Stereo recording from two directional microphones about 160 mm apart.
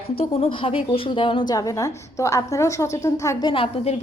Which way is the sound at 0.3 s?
35° left (ahead or behind).